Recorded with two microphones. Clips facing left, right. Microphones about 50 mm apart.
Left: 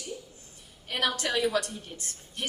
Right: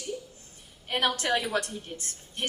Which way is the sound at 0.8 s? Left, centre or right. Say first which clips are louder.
Right 2 dB; right.